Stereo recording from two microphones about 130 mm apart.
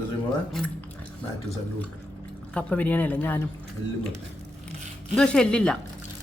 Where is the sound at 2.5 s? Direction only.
10° left (ahead or behind).